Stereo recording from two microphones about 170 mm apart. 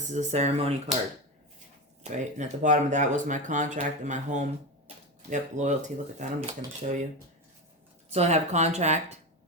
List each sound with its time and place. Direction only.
0.1 s speech: 45° right (ahead or behind)
2.0 s speech: 45° right (ahead or behind)
8.1 s speech: 40° right (ahead or behind)